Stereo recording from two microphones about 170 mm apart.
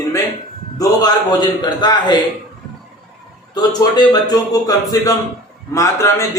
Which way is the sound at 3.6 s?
25° left (ahead or behind).